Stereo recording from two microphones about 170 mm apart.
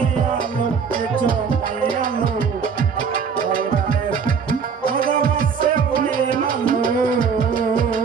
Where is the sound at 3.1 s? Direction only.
55° right (ahead or behind).